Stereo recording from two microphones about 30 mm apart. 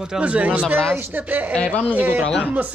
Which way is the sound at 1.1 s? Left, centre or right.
Right.